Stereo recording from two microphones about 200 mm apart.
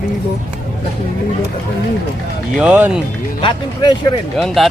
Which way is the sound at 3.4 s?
20° left (ahead or behind).